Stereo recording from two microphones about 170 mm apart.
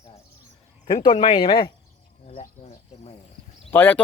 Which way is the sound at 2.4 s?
40° left (ahead or behind).